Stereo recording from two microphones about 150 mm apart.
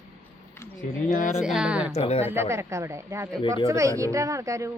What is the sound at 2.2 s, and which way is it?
Speech, 15° right (ahead or behind).